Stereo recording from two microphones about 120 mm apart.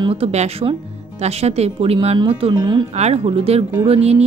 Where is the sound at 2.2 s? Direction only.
45° right (ahead or behind).